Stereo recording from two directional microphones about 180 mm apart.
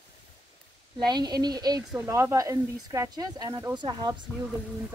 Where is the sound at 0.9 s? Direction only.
25° right (ahead or behind).